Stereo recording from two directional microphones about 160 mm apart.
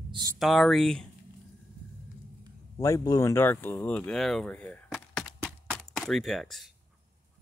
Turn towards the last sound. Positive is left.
turn(degrees=0)  # may be behind; listen again after turning